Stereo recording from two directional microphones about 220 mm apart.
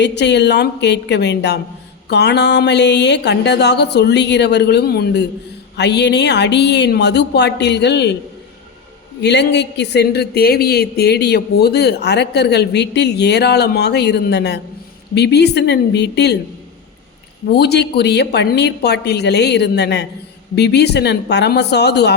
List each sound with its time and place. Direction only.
0.0 s speech: 50° left (ahead or behind)
9.2 s speech: 50° left (ahead or behind)
17.5 s speech: 50° left (ahead or behind)